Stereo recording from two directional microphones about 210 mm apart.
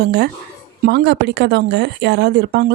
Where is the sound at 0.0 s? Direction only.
50° right (ahead or behind).